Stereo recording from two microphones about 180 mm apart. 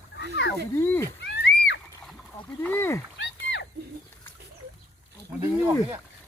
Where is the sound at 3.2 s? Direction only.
80° left.